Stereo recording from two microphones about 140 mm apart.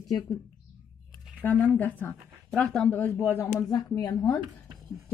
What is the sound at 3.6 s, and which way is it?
Speech, 25° left (ahead or behind).